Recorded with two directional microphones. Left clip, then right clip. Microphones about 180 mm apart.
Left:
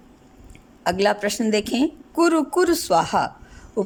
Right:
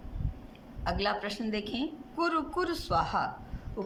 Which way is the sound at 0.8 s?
50° left (ahead or behind).